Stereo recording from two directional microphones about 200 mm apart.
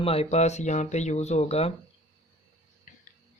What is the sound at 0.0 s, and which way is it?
Speech, 30° left (ahead or behind).